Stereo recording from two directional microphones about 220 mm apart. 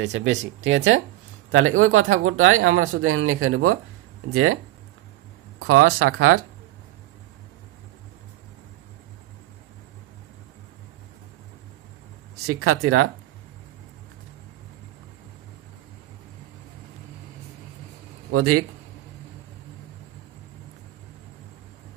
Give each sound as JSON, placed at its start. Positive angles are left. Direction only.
{"t": 0.0, "sound": "speech", "side_deg": -55}
{"t": 5.6, "sound": "speech", "side_deg": -80}
{"t": 12.5, "sound": "speech", "side_deg": -80}
{"t": 18.3, "sound": "speech", "side_deg": -90}